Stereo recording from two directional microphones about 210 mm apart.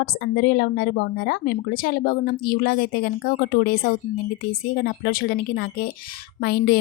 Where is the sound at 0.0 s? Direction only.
45° left (ahead or behind).